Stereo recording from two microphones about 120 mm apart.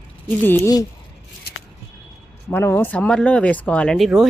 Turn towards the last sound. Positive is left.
turn(degrees=5)  # may be behind; listen again after turning